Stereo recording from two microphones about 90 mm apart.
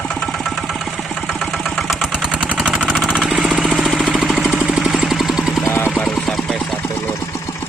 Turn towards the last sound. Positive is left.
turn(degrees=0)  # may be behind; listen again after turning